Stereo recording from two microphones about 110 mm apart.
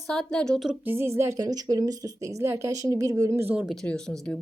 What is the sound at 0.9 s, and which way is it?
A woman's voice, 20° right (ahead or behind).